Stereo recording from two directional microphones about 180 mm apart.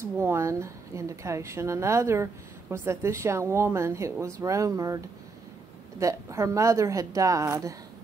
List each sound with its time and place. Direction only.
0.2 s speech: 15° right (ahead or behind)